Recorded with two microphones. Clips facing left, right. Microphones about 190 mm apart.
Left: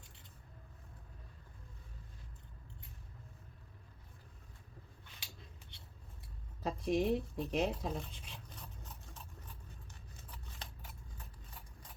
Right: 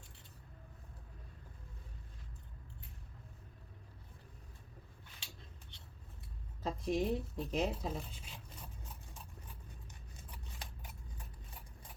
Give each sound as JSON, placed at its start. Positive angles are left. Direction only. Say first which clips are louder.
{"t": 6.6, "sound": "zipper", "louder": "left 2 dB", "side_deg": 0}
{"t": 10.3, "sound": "scissors", "louder": "even", "side_deg": -10}